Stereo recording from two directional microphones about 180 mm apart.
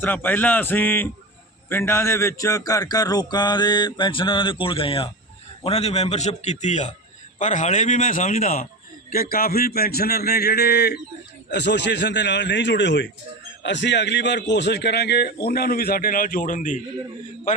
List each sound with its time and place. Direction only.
0.0 s a man's voice: 10° left (ahead or behind); by 16.8 s 45° left (ahead or behind)